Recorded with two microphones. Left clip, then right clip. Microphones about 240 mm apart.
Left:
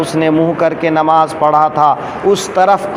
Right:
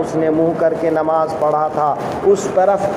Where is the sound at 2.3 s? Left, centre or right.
Left.